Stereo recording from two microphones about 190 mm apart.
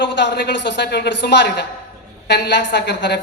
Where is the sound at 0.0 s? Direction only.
65° left (ahead or behind).